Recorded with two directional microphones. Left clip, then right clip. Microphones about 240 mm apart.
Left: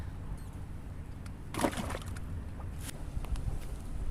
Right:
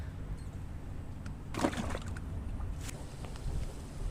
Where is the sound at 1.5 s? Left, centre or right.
Left.